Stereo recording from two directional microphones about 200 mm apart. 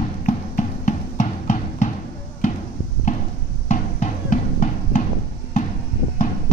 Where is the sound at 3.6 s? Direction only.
40° left (ahead or behind).